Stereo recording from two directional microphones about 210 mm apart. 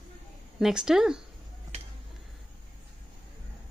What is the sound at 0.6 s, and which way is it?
Speech, 5° right (ahead or behind).